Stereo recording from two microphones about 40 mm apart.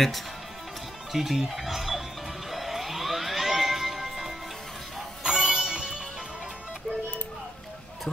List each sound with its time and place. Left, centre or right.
1.1 s speech: centre
2.5 s music: centre